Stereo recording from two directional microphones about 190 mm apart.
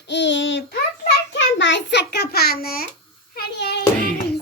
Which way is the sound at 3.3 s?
65° left (ahead or behind).